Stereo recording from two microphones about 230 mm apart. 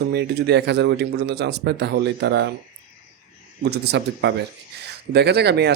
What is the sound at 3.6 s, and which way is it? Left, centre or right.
A man's voice, right.